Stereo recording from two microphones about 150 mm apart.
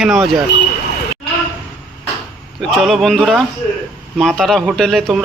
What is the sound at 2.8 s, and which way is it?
Speech, centre (ahead or behind).